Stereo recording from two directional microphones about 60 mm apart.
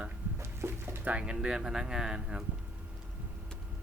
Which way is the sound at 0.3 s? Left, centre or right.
Right.